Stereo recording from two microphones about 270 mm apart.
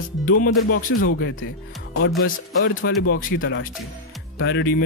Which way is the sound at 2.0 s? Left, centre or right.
Left.